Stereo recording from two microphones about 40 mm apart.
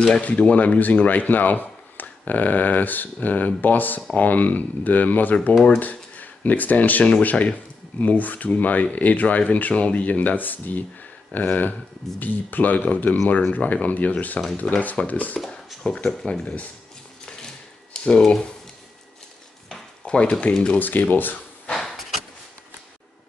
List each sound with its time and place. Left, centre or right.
0.2 s speech: left
1.0 s speech: left
15.8 s speech: left
17.9 s a sound: left
20.1 s speech: left
20.8 s speech: left
21.7 s a sound: centre